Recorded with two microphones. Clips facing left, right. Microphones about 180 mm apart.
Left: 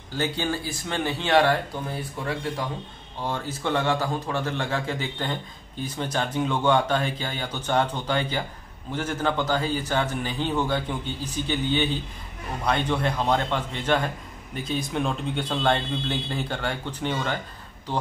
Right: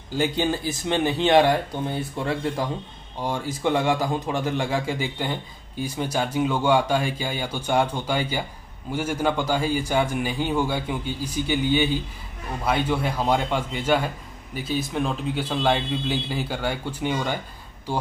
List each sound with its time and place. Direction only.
0.2 s speech: 20° right (ahead or behind)
1.9 s speech: 25° right (ahead or behind)
3.2 s a man's voice: 15° right (ahead or behind)